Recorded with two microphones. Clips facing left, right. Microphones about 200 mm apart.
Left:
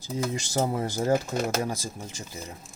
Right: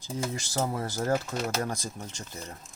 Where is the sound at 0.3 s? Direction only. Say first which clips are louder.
Left 4 dB; 20° left (ahead or behind).